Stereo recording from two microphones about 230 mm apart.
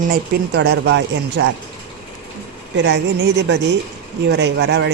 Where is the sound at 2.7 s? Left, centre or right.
Right.